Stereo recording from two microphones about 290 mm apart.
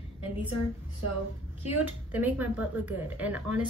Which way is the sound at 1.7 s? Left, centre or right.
Centre.